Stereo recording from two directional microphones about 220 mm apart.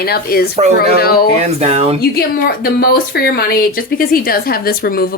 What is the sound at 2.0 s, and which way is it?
A woman's voice, 45° left (ahead or behind).